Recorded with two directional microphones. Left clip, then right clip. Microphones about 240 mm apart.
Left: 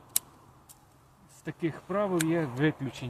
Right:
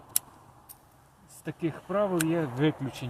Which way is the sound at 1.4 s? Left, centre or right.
Right.